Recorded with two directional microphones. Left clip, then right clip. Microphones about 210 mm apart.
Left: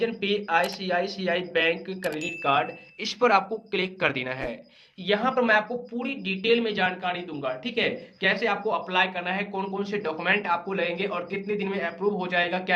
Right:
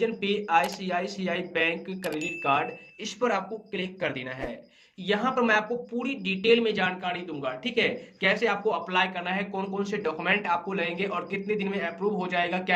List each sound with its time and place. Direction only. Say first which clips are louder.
0.0 s speech: left 1 dB; 5° left (ahead or behind)
3.0 s speech: left 6 dB; 25° left (ahead or behind)
5.0 s speech: left 2 dB; 5° left (ahead or behind)